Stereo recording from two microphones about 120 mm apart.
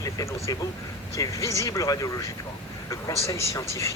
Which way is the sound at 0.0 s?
25° left (ahead or behind).